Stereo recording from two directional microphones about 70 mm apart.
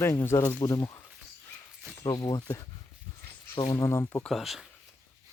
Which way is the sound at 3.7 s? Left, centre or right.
Left.